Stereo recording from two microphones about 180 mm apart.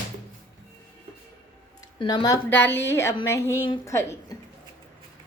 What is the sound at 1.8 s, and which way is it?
A woman's voice, 25° left (ahead or behind).